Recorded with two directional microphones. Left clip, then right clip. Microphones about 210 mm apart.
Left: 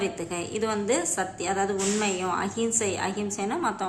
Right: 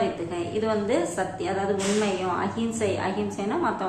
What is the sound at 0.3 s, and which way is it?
A woman's voice, 25° left (ahead or behind).